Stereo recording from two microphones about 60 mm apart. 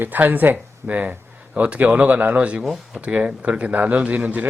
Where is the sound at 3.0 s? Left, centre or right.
Right.